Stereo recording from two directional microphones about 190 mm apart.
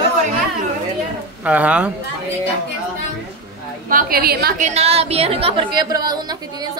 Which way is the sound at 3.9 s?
50° right (ahead or behind).